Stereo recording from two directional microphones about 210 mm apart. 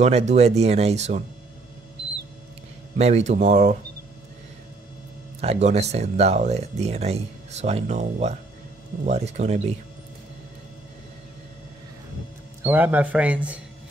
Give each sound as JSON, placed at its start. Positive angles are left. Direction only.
{"t": 0.0, "sound": "speech", "side_deg": -35}
{"t": 3.0, "sound": "speech", "side_deg": -30}
{"t": 5.4, "sound": "speech", "side_deg": -30}
{"t": 12.6, "sound": "a man's voice", "side_deg": -10}